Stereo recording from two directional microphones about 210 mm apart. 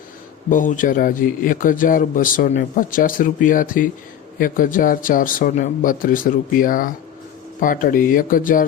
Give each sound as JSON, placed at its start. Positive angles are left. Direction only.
{"t": 0.5, "sound": "speech", "side_deg": 40}